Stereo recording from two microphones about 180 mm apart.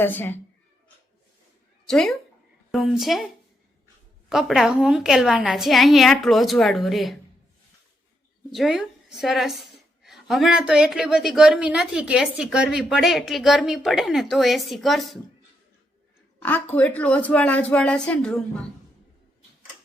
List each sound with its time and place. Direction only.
0.0 s speech: 10° left (ahead or behind)
1.9 s a woman's voice: 5° left (ahead or behind)
4.3 s a woman's voice: centre (ahead or behind)
8.4 s a woman's voice: centre (ahead or behind)
16.4 s speech: 10° left (ahead or behind)